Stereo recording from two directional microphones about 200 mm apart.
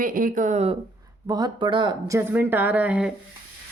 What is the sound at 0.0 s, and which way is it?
Speech, 45° right (ahead or behind).